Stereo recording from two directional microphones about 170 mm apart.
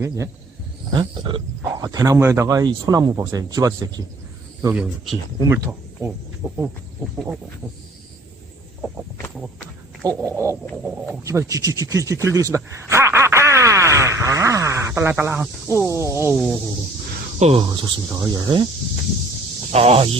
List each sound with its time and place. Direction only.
0.9 s speech: 25° right (ahead or behind)
4.7 s a sound: 5° right (ahead or behind)
5.4 s speech: 20° right (ahead or behind)
10.0 s a sound: 20° right (ahead or behind)
17.4 s speech: 30° right (ahead or behind)
19.7 s speech: 35° right (ahead or behind)